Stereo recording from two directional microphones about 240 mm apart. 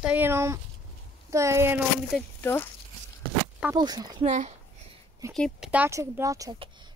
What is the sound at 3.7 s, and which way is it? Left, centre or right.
Speech, centre.